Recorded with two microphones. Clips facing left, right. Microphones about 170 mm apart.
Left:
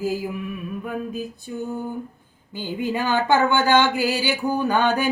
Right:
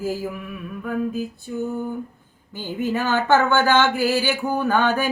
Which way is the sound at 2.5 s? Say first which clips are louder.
Right 1 dB; 15° left (ahead or behind).